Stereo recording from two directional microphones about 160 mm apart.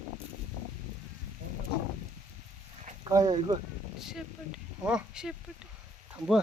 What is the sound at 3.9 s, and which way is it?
Speech, 5° right (ahead or behind).